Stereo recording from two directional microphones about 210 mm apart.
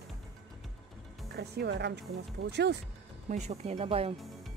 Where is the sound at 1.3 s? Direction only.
50° right (ahead or behind).